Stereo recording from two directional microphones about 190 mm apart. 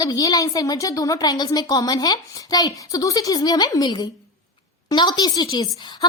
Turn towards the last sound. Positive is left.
turn(degrees=20)  # may be behind; listen again after turning